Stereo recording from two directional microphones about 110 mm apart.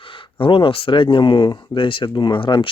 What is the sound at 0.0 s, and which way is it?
Speech, 50° left (ahead or behind).